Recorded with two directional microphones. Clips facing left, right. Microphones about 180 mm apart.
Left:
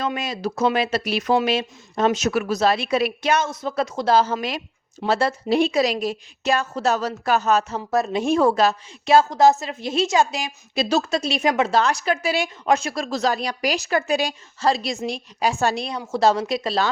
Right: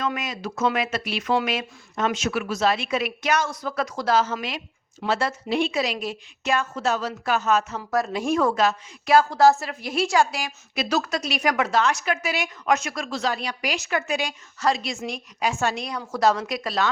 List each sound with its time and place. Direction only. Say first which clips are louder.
0.0 s a woman's voice: left 3 dB; 30° left (ahead or behind)